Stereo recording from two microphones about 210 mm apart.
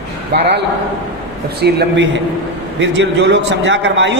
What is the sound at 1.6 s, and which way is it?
A man's voice, 55° right (ahead or behind).